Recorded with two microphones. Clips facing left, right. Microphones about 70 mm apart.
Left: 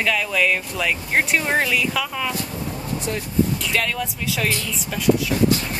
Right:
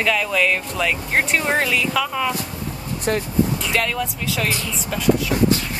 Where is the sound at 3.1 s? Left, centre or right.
Right.